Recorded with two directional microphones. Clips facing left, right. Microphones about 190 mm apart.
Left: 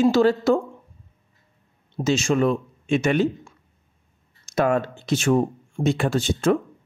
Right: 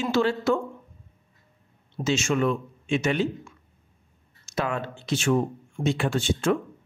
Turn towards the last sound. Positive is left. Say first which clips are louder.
# left 3 dB
turn(degrees=40)  # may be behind; listen again after turning